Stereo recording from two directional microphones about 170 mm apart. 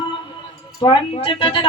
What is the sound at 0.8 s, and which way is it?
Speech, 30° left (ahead or behind).